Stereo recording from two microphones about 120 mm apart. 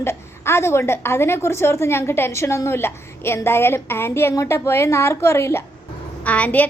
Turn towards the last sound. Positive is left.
turn(degrees=15)  # may be behind; listen again after turning